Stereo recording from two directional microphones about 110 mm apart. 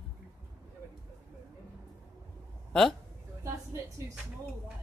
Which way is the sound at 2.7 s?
5° left (ahead or behind).